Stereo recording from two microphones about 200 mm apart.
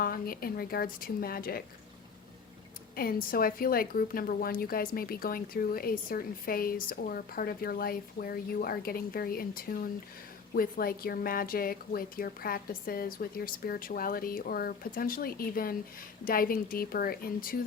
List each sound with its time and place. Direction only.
0.0 s speech: 45° left (ahead or behind)
2.9 s a woman's voice: 50° left (ahead or behind)